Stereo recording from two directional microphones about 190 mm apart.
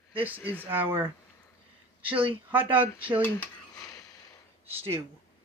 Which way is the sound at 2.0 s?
30° right (ahead or behind).